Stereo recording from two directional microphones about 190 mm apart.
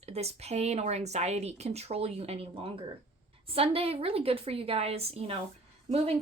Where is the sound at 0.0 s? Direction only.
35° right (ahead or behind).